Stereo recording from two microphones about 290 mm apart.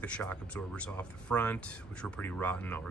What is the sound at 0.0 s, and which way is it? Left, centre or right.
Speech, centre.